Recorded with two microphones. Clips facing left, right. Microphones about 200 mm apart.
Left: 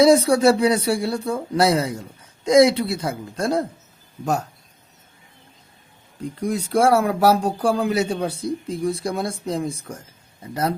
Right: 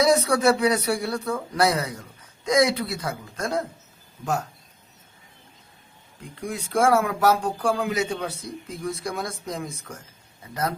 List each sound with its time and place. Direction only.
0.0 s speech: 30° left (ahead or behind)
6.4 s speech: 35° left (ahead or behind)